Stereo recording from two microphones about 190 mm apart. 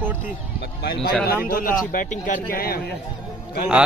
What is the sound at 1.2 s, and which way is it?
A man's voice, 50° left (ahead or behind).